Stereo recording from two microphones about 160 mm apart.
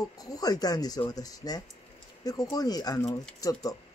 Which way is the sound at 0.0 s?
20° left (ahead or behind).